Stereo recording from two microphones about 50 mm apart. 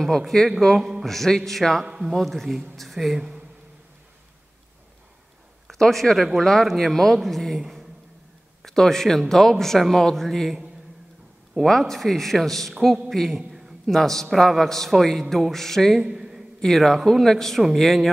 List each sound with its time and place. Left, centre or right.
0.0 s speech: centre
0.7 s a man's voice: centre
1.0 s a man's voice: centre
3.2 s a sound: centre
5.7 s a man's voice: centre
8.6 s speech: centre
11.6 s a man's voice: centre
13.4 s a sound: centre
13.9 s a man's voice: centre
16.0 s a sound: centre
16.6 s a man's voice: centre